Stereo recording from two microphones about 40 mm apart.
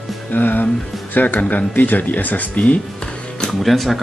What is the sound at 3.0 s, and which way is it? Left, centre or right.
Music, left.